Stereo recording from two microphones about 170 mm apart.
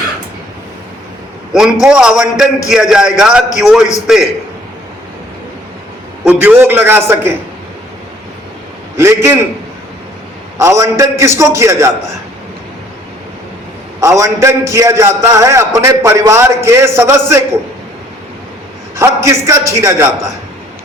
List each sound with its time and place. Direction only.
1.5 s a man's voice: 5° right (ahead or behind)
6.2 s a man's voice: 10° right (ahead or behind)
9.0 s a man's voice: 15° right (ahead or behind)
10.6 s a man's voice: 20° right (ahead or behind)
14.0 s a man's voice: 15° right (ahead or behind)
18.9 s a man's voice: 15° right (ahead or behind)